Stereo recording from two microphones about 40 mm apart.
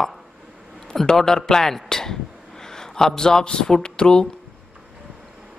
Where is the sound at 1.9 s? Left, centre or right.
Centre.